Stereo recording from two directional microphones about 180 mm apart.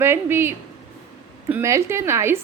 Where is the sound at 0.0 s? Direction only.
15° right (ahead or behind).